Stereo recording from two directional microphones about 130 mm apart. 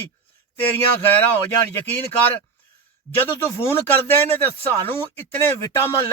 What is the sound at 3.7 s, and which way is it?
Speech, 15° left (ahead or behind).